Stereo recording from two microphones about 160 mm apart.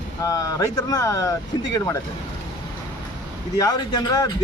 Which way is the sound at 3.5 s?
25° left (ahead or behind).